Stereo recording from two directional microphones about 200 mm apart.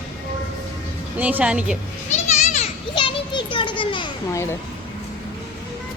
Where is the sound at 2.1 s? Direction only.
35° left (ahead or behind).